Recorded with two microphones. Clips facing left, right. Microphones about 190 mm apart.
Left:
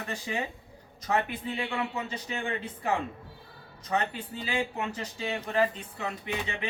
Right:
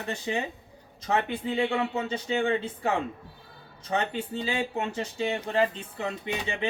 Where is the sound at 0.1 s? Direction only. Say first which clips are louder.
Right 4 dB; 25° right (ahead or behind).